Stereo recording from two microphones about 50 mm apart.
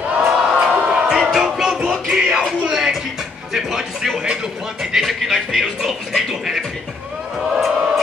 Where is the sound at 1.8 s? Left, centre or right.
Centre.